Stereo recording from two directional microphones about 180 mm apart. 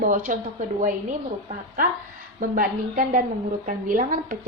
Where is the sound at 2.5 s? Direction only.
50° right (ahead or behind).